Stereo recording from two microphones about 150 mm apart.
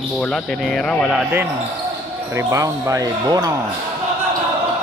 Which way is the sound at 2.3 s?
20° right (ahead or behind).